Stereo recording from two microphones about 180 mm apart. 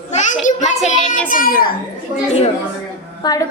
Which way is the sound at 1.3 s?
50° left (ahead or behind).